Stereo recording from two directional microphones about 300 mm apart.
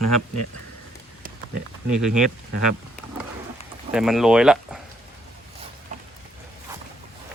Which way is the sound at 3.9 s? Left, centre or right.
Centre.